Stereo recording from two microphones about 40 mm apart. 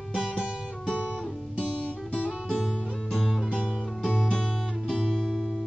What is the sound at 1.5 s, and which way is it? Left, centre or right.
Music, left.